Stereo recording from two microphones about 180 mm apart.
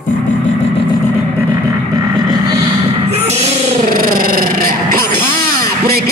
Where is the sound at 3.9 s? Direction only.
50° right (ahead or behind).